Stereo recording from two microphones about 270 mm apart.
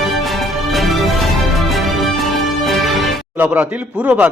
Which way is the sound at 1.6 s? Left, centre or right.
Centre.